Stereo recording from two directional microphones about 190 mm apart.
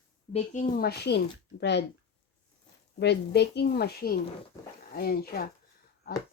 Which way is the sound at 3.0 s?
65° left (ahead or behind).